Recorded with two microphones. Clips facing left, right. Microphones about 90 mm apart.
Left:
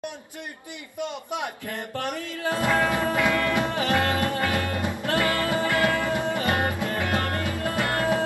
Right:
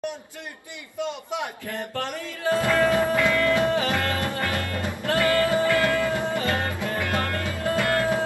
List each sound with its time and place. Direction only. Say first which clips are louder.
2.0 s music: right 2 dB; 20° left (ahead or behind)